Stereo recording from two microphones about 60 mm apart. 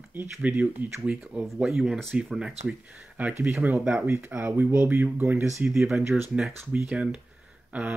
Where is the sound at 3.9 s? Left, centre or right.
Right.